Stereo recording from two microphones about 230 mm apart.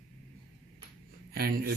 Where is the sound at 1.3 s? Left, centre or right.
Right.